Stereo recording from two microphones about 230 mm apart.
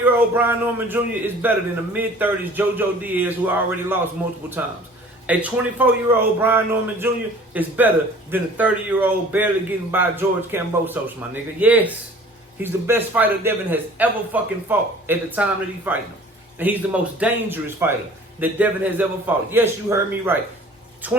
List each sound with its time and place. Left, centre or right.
0.0 s a man's voice: centre
5.2 s a man's voice: centre